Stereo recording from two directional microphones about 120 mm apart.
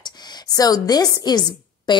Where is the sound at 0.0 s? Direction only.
30° left (ahead or behind).